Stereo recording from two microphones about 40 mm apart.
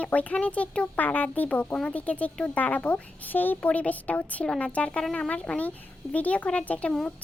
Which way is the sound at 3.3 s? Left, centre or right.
Left.